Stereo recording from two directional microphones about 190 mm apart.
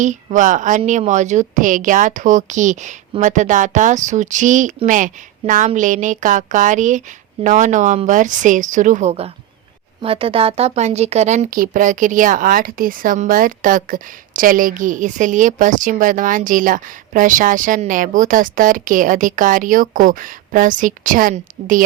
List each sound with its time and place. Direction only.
0.0 s a woman's voice: 40° right (ahead or behind)